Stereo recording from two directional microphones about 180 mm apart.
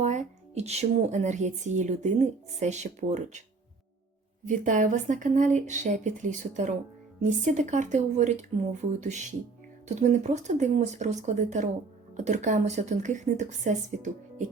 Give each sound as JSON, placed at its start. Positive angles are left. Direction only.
{"t": 0.0, "sound": "speech", "side_deg": -40}
{"t": 4.4, "sound": "speech", "side_deg": -45}